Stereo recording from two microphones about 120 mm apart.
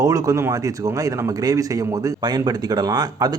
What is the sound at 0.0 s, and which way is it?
Speech, 30° right (ahead or behind).